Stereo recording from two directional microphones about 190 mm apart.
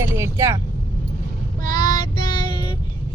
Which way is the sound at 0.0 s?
15° right (ahead or behind).